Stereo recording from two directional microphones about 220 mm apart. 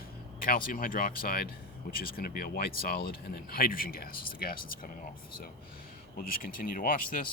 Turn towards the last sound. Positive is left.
turn(degrees=40)  # may be behind; listen again after turning